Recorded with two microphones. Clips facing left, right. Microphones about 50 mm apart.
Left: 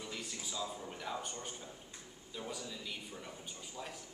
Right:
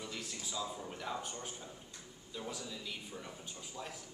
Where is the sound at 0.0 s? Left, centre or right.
Centre.